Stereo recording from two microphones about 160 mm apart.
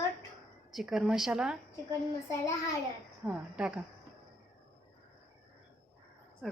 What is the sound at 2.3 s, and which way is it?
Speech, 20° left (ahead or behind).